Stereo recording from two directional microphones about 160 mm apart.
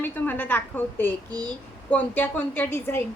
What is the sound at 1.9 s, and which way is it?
A woman's voice, 10° left (ahead or behind).